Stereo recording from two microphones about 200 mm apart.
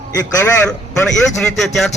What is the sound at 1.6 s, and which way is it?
Speech, centre (ahead or behind).